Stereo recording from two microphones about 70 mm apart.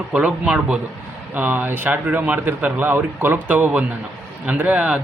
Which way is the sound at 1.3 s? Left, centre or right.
Right.